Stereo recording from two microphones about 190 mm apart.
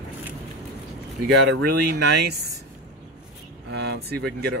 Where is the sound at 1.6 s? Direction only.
60° right (ahead or behind).